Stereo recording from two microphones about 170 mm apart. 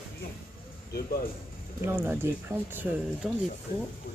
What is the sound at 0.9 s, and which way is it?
Speech, 65° left (ahead or behind).